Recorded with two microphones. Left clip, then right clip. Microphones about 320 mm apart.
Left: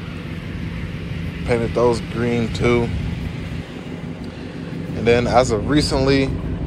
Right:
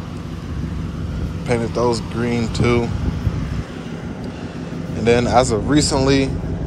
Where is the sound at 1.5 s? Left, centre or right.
Centre.